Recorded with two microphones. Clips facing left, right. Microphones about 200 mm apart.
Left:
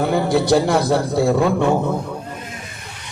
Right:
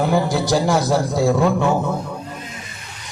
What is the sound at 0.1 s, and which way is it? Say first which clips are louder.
A man's voice: left 2 dB; 60° left (ahead or behind).